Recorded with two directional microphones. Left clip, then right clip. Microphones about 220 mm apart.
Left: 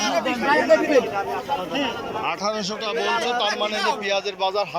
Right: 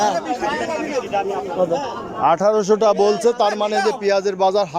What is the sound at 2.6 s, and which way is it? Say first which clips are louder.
Speech: right 10 dB; 90° right.